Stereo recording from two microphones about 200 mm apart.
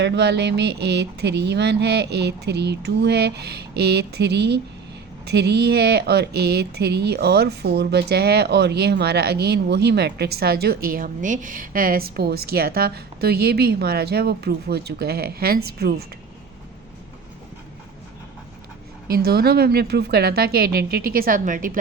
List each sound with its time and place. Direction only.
0.0 s speech: 60° right (ahead or behind)
19.0 s speech: 50° right (ahead or behind)